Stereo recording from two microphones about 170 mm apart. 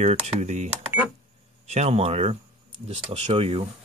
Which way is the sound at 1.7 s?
40° right (ahead or behind).